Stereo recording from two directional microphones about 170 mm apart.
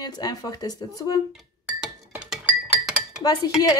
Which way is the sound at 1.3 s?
5° right (ahead or behind).